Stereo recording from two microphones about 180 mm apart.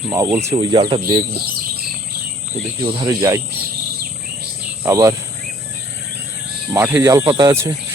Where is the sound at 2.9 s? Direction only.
20° right (ahead or behind).